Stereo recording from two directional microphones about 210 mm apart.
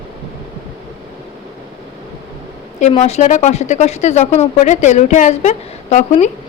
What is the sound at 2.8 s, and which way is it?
A woman's voice, 30° left (ahead or behind).